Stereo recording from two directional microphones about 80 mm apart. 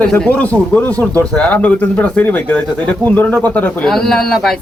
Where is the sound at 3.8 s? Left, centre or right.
Centre.